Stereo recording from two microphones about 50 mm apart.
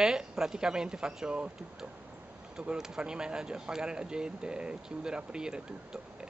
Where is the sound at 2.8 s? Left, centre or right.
Centre.